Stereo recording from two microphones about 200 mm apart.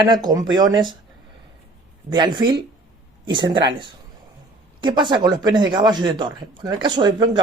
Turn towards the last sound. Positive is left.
turn(degrees=-20)  # may be behind; listen again after turning